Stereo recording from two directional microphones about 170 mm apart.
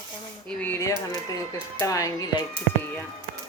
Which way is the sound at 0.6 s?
15° left (ahead or behind).